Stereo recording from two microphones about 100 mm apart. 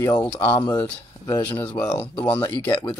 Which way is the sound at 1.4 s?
20° left (ahead or behind).